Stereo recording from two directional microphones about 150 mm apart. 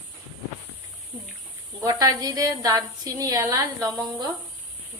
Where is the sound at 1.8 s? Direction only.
25° right (ahead or behind).